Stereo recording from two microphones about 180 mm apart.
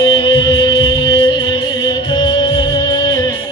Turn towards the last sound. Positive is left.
turn(degrees=25)  # may be behind; listen again after turning